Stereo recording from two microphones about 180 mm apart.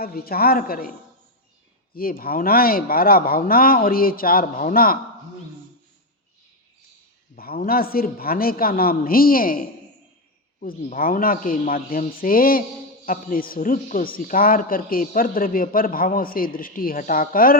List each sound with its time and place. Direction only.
0.0 s a man's voice: 55° left (ahead or behind)
2.0 s a man's voice: 55° left (ahead or behind)
7.3 s a man's voice: 55° left (ahead or behind)